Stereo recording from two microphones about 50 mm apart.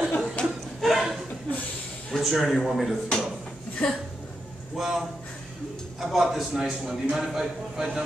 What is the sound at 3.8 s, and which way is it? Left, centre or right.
Speech, centre.